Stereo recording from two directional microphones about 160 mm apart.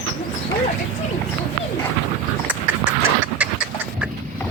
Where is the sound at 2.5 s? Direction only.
10° right (ahead or behind).